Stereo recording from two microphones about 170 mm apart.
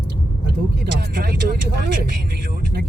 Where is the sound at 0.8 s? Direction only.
65° right (ahead or behind).